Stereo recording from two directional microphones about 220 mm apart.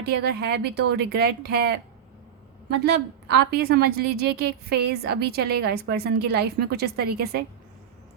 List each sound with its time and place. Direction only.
0.0 s a woman's voice: 50° right (ahead or behind)